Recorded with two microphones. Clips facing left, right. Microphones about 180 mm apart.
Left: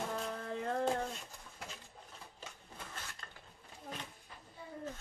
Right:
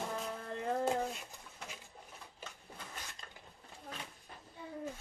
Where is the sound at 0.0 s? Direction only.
Centre (ahead or behind).